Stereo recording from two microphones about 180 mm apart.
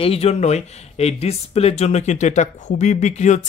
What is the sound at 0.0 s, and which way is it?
Speech, 35° left (ahead or behind).